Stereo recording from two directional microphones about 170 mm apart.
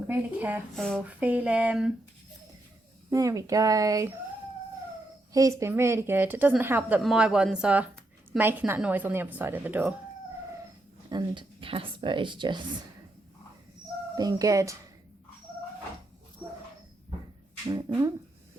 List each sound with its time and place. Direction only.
0.1 s speech: 10° right (ahead or behind)
3.1 s speech: 20° right (ahead or behind)
5.3 s speech: 20° right (ahead or behind)
11.1 s speech: 25° right (ahead or behind)
14.2 s speech: 20° right (ahead or behind)
17.8 s speech: 20° right (ahead or behind)